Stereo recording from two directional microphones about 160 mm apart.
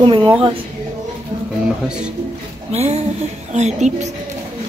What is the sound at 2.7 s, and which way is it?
A woman's voice, 40° right (ahead or behind).